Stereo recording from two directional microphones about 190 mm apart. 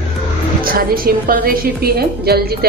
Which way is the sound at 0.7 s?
50° right (ahead or behind).